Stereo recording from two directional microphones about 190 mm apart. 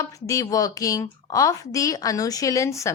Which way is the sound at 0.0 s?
15° left (ahead or behind).